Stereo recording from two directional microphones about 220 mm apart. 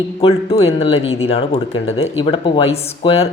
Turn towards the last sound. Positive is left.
turn(degrees=25)  # may be behind; listen again after turning